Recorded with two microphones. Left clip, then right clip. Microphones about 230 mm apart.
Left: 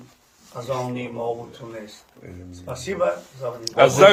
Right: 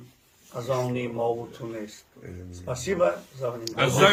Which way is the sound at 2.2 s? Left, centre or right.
Centre.